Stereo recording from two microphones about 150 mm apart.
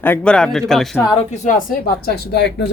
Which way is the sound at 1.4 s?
70° left (ahead or behind).